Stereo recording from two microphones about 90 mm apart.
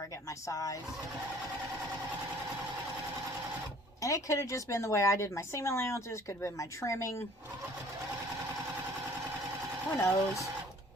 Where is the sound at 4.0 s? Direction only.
35° left (ahead or behind).